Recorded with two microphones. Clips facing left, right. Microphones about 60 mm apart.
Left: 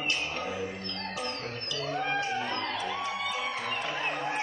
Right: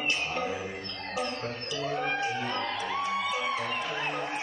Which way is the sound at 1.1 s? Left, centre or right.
Right.